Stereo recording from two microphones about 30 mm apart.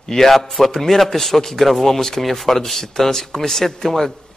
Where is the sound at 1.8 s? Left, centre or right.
Centre.